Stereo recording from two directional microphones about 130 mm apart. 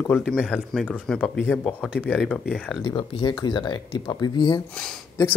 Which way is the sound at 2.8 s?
35° left (ahead or behind).